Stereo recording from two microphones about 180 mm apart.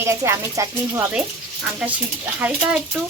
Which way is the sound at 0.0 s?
15° right (ahead or behind).